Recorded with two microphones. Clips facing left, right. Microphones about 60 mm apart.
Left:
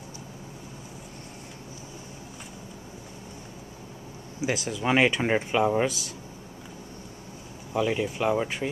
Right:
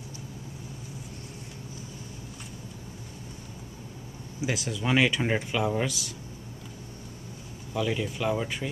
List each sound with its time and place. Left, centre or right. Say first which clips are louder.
4.5 s speech: left 2 dB; centre
7.7 s speech: left 3 dB; left